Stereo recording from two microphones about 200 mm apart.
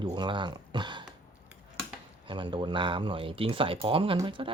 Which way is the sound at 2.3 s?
25° right (ahead or behind).